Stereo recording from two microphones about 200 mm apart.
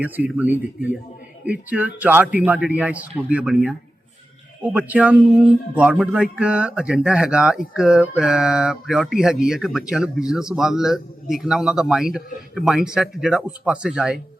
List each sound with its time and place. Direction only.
0.0 s a man's voice: 10° right (ahead or behind)